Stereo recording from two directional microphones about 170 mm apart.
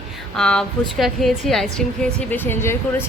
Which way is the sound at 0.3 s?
5° left (ahead or behind).